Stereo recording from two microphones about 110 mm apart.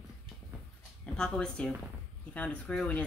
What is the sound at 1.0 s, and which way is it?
Speech, 5° left (ahead or behind).